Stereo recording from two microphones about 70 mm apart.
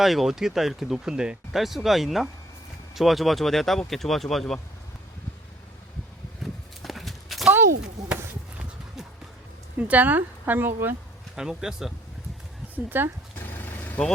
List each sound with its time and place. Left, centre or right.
0.0 s speech: centre
6.4 s horse: centre
9.7 s speech: right
11.3 s speech: centre
12.7 s speech: right
13.5 s vehicle: left